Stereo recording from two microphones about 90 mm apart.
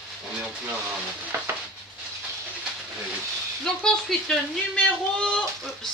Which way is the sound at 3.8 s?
10° left (ahead or behind).